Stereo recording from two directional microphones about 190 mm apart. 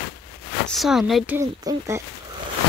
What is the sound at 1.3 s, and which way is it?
Speech, 15° right (ahead or behind).